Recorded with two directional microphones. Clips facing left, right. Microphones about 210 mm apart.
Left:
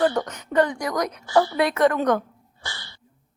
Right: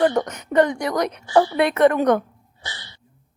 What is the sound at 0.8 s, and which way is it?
A woman's voice, 30° right (ahead or behind).